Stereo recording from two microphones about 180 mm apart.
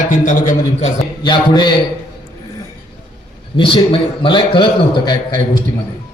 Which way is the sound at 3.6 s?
30° left (ahead or behind).